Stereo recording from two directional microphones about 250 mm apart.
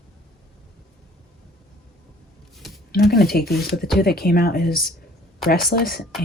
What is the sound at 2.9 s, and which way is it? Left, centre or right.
Speech, left.